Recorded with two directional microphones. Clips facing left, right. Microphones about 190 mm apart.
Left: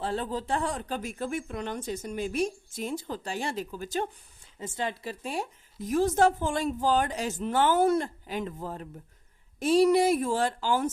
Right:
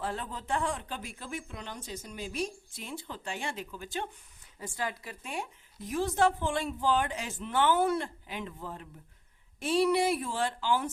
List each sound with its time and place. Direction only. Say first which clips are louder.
0.0 s speech: left 6 dB; 30° left (ahead or behind)
4.6 s speech: left 4 dB; 25° left (ahead or behind); by 10.9 s 45° left (ahead or behind)